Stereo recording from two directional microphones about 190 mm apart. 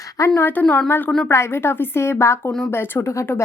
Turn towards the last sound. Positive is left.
turn(degrees=15)  # may be behind; listen again after turning